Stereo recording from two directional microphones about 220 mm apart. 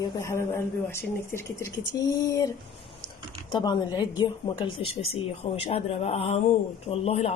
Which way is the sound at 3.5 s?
20° left (ahead or behind).